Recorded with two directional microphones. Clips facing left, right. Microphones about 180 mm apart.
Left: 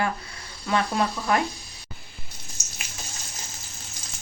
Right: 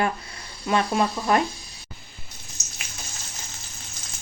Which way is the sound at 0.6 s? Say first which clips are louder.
Right 2 dB; 20° right (ahead or behind).